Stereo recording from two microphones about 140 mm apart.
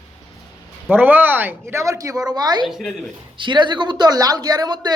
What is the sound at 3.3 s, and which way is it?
Speech, 35° right (ahead or behind).